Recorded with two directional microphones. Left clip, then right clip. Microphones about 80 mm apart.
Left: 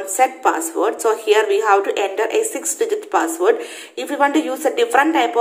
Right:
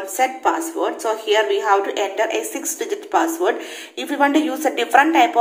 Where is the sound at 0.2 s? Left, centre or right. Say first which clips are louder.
Left 2 dB; left.